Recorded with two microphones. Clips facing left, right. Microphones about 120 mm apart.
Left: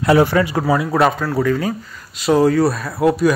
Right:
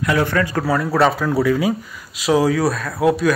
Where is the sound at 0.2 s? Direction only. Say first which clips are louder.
Left 4 dB; 15° left (ahead or behind).